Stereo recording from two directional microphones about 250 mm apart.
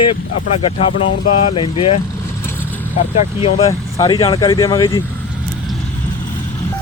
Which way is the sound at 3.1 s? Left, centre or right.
Left.